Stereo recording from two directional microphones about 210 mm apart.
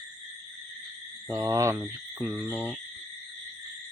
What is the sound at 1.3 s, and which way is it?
Speech, 15° right (ahead or behind).